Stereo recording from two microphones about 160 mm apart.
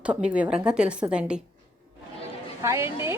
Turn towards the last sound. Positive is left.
turn(degrees=-15)  # may be behind; listen again after turning